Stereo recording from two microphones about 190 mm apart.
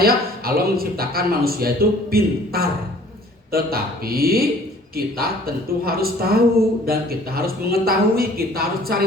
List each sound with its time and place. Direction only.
0.0 s a man's voice: 55° right (ahead or behind)